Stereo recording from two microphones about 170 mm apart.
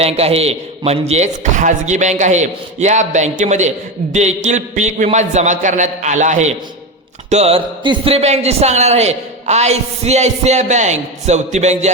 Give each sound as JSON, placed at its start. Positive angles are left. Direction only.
{"t": 0.0, "sound": "a man's voice", "side_deg": -35}